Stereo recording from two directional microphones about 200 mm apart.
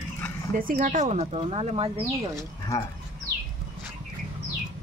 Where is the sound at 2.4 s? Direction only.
15° left (ahead or behind).